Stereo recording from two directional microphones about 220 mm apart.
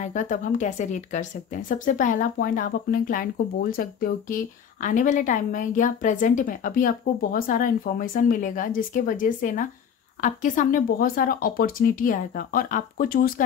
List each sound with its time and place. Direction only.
0.0 s a woman's voice: 35° left (ahead or behind)